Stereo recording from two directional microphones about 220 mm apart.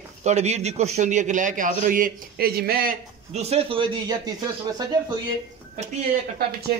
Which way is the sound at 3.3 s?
30° right (ahead or behind).